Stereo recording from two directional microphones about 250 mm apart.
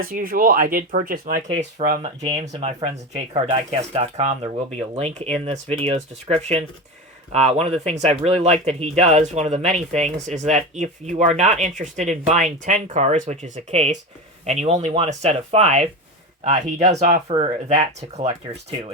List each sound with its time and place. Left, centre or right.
0.1 s speech: right